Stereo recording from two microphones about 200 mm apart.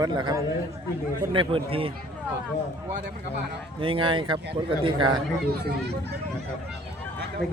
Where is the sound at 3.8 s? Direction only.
25° right (ahead or behind).